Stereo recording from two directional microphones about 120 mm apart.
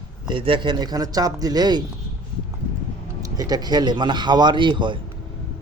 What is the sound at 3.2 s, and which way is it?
Speech, 30° right (ahead or behind).